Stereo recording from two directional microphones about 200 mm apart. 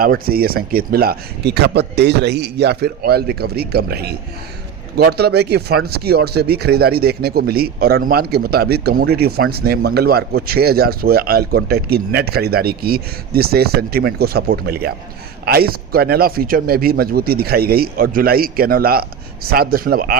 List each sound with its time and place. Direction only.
0.0 s speech: 45° right (ahead or behind)